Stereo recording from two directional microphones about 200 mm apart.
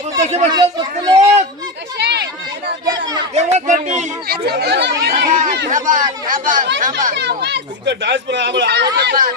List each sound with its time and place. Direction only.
0.3 s speech: 35° right (ahead or behind)
0.8 s a man's voice: 20° right (ahead or behind)
2.0 s chatter: 55° right (ahead or behind)
2.8 s a sound: 20° right (ahead or behind)
3.3 s speech: 35° right (ahead or behind)
4.3 s speech: 55° right (ahead or behind)
5.7 s speech: 40° right (ahead or behind)
7.2 s speech: 60° right (ahead or behind)